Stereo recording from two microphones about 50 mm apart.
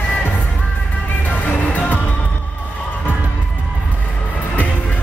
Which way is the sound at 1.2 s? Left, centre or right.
Left.